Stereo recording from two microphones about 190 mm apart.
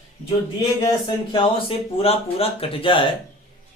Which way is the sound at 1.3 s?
30° left (ahead or behind).